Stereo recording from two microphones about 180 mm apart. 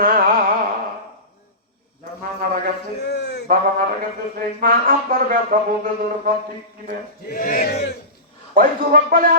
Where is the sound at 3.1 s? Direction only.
65° left (ahead or behind).